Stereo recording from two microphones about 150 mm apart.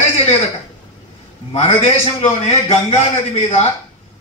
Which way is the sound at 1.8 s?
40° left (ahead or behind).